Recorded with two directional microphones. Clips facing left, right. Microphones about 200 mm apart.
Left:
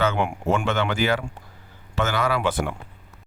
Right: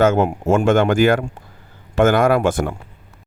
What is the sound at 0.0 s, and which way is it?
Speech, 45° right (ahead or behind).